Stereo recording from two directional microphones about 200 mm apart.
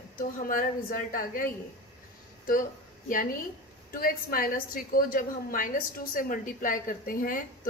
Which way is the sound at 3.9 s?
45° left (ahead or behind).